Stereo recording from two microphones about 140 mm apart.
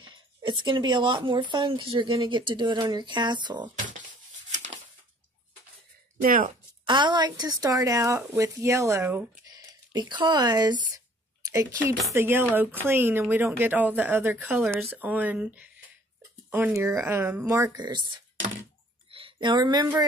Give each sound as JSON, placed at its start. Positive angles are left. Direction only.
{"t": 0.0, "sound": "speech", "side_deg": -35}
{"t": 6.2, "sound": "speech", "side_deg": -80}
{"t": 6.9, "sound": "speech", "side_deg": -30}
{"t": 11.4, "sound": "a woman's voice", "side_deg": -20}
{"t": 17.7, "sound": "speech", "side_deg": -30}
{"t": 19.0, "sound": "a sound", "side_deg": -40}